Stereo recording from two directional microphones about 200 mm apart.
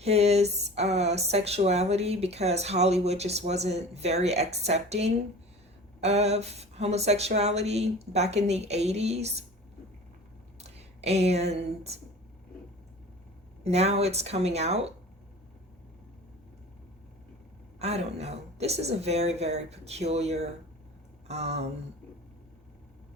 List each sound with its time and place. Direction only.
0.0 s a sound: 30° right (ahead or behind)
1.3 s speech: 30° right (ahead or behind)
10.6 s speech: 30° right (ahead or behind)
13.7 s speech: 30° right (ahead or behind)
17.7 s speech: 30° right (ahead or behind)